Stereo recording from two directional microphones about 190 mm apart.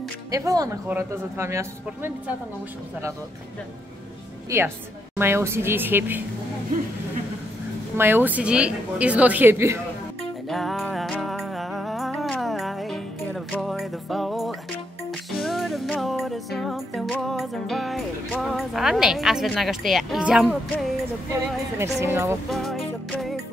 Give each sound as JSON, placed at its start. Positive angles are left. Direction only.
{"t": 0.3, "sound": "a woman's voice", "side_deg": -20}
{"t": 4.5, "sound": "a woman's voice", "side_deg": -15}
{"t": 8.0, "sound": "a woman's voice", "side_deg": -10}
{"t": 10.5, "sound": "music", "side_deg": 0}
{"t": 21.3, "sound": "a woman's voice", "side_deg": -15}
{"t": 22.5, "sound": "music", "side_deg": 0}